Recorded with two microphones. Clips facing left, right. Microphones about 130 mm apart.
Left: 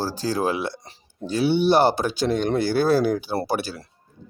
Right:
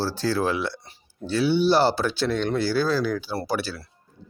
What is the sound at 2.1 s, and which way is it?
Speech, 15° left (ahead or behind).